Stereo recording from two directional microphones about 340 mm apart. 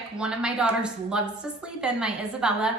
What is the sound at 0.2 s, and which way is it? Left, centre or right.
A woman's voice, centre.